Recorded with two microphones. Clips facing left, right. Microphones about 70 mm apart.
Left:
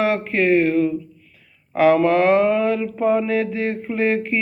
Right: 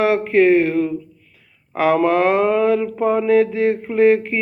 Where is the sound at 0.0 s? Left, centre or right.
Centre.